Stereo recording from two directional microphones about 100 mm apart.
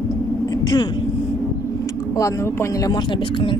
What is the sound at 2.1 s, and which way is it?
Speech, 30° left (ahead or behind).